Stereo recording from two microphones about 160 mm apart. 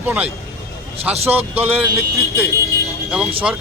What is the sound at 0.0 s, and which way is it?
Speech, 10° right (ahead or behind).